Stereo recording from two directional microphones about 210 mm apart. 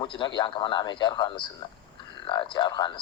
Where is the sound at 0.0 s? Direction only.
20° left (ahead or behind).